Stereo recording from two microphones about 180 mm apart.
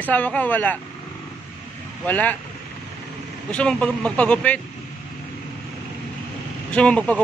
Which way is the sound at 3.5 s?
5° left (ahead or behind).